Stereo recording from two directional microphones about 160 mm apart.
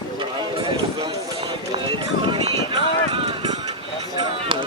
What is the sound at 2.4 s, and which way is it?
Run, 35° right (ahead or behind).